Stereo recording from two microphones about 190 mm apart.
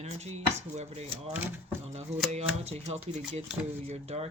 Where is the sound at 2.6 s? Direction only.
35° right (ahead or behind).